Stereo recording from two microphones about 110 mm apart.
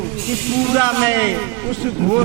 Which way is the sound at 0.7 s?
20° right (ahead or behind).